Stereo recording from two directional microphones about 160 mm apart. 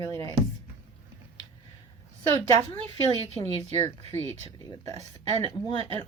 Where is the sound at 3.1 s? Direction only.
45° right (ahead or behind).